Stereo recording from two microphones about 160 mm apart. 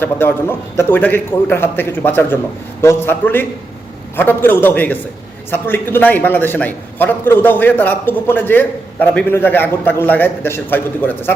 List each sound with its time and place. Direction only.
0.0 s a man's voice: 15° left (ahead or behind)